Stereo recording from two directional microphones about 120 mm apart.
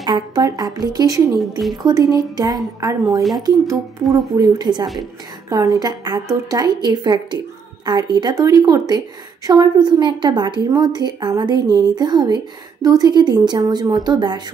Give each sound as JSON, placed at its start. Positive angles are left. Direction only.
{"t": 0.0, "sound": "a woman's voice", "side_deg": -35}
{"t": 3.2, "sound": "speech", "side_deg": 0}
{"t": 4.4, "sound": "a woman's voice", "side_deg": -35}